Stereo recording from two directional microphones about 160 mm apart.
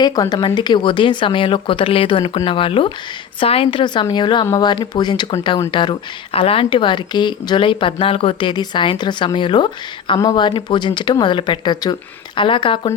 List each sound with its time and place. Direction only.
0.0 s speech: 25° left (ahead or behind)